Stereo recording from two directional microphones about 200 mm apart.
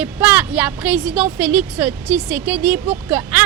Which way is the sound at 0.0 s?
5° right (ahead or behind).